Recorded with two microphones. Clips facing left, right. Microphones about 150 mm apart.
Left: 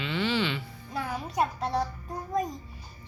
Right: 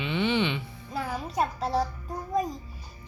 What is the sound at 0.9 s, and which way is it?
Speech, 5° right (ahead or behind).